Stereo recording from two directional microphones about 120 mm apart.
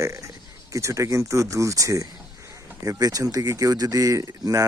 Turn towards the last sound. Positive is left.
turn(degrees=-30)  # may be behind; listen again after turning